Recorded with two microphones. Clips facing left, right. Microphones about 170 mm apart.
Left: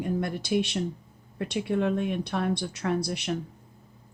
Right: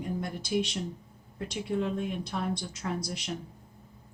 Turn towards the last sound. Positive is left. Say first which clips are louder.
# left 6 dB
turn(degrees=65)  # may be behind; listen again after turning